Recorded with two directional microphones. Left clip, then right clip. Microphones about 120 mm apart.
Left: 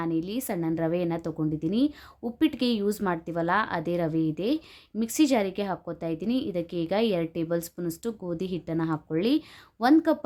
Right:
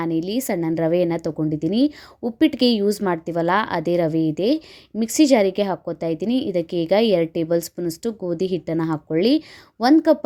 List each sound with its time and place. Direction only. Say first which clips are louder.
0.0 s a woman's voice: right 7 dB; 40° right (ahead or behind)